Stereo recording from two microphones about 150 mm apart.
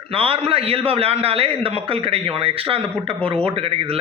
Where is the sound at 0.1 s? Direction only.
40° right (ahead or behind).